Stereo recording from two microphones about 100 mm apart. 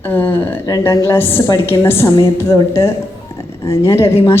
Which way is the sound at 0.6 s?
35° left (ahead or behind).